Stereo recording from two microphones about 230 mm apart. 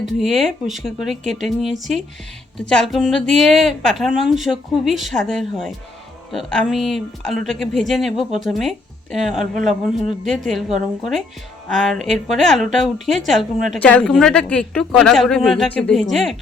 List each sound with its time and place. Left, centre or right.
0.0 s a woman's voice: centre